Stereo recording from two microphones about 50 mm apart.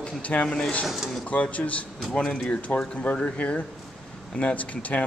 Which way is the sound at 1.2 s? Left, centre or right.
Left.